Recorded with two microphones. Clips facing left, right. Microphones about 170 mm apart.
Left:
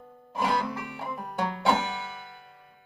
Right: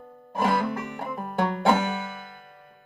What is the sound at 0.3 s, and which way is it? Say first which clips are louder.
Music: right 3 dB; 50° right (ahead or behind).